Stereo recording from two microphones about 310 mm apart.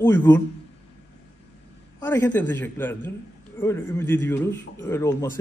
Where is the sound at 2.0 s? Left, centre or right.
Centre.